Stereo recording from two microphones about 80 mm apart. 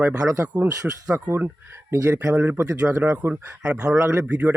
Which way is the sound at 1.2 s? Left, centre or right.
Right.